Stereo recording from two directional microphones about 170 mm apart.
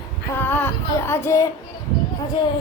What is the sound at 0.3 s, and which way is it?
Female singing, 10° left (ahead or behind).